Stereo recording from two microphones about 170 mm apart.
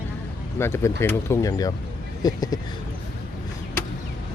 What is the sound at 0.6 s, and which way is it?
Speech, 15° left (ahead or behind).